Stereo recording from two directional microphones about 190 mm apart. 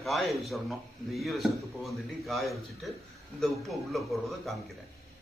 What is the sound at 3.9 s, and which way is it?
Speech, centre (ahead or behind).